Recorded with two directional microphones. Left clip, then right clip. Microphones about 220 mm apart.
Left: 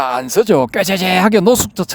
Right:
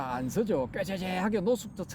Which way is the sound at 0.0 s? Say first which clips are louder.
Left 17 dB; 40° left (ahead or behind).